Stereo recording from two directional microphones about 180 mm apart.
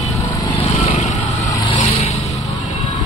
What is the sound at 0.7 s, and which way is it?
Vehicle, 40° left (ahead or behind).